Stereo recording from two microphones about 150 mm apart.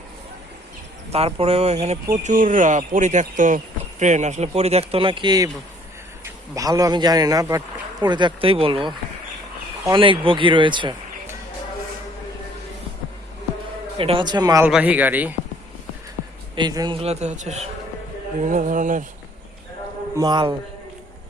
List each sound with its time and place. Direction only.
1.1 s speech: 40° right (ahead or behind)
2.2 s speech: 60° right (ahead or behind); by 10.9 s 30° right (ahead or behind)
14.0 s a man's voice: 35° right (ahead or behind)
14.6 s speech: 10° right (ahead or behind)
16.6 s a man's voice: 30° right (ahead or behind)
17.0 s speech: 45° right (ahead or behind)
20.1 s a man's voice: 30° right (ahead or behind)